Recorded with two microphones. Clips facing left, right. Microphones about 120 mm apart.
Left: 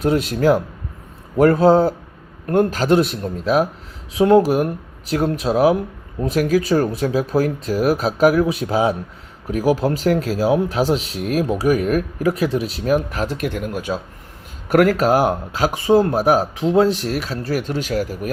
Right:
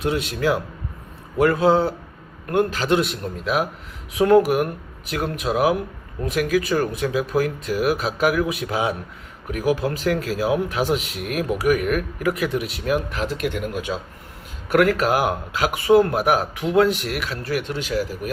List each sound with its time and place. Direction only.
0.0 s speech: 40° left (ahead or behind)